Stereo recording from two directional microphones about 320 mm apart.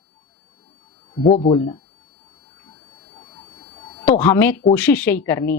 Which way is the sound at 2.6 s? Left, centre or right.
Centre.